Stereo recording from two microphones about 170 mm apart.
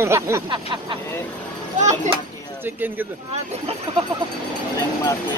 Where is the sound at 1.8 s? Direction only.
45° right (ahead or behind).